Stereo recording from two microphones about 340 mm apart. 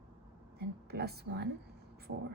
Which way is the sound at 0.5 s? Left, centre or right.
Right.